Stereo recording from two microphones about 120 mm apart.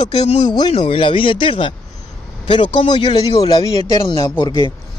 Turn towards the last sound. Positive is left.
turn(degrees=40)  # may be behind; listen again after turning